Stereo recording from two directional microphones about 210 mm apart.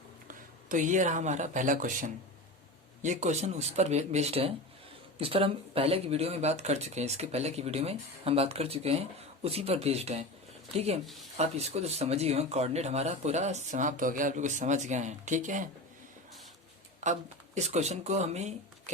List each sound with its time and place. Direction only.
0.7 s speech: 35° right (ahead or behind)
17.0 s speech: 35° right (ahead or behind)